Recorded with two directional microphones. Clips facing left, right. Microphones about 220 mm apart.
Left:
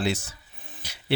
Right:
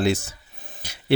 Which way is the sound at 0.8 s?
50° right (ahead or behind).